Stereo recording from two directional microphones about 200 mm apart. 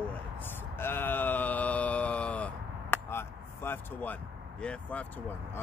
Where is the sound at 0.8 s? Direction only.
10° left (ahead or behind).